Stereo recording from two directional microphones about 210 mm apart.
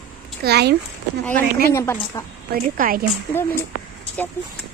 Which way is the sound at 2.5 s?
40° right (ahead or behind).